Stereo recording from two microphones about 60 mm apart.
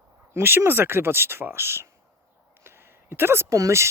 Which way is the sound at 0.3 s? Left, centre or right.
Right.